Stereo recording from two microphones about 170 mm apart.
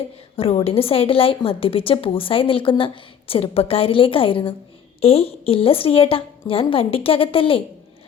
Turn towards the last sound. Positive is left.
turn(degrees=30)  # may be behind; listen again after turning